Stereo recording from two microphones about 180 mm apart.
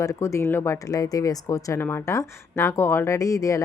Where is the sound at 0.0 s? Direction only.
15° left (ahead or behind).